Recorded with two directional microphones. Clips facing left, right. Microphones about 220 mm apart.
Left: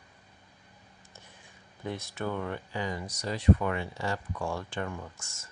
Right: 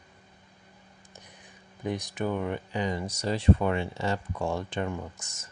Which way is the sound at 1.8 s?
15° right (ahead or behind).